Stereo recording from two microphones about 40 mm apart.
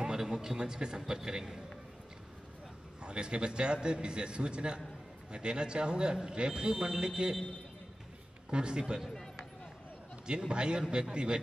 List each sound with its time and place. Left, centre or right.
0.0 s a man's voice: centre
3.0 s speech: right
8.5 s speech: right
9.1 s a sound: centre
10.2 s speech: right